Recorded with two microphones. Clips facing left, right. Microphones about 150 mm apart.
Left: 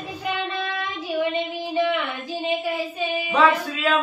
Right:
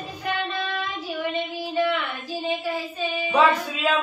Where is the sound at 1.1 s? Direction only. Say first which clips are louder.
Left 5 dB; 15° left (ahead or behind).